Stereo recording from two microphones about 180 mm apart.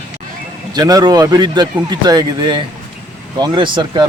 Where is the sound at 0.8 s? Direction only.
20° right (ahead or behind).